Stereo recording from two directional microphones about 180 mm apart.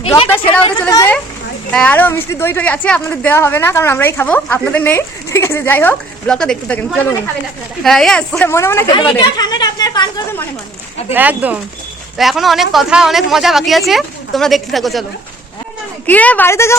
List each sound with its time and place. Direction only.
0.8 s speech: 15° left (ahead or behind)
11.1 s speech: 10° right (ahead or behind)
16.0 s speech: 10° left (ahead or behind)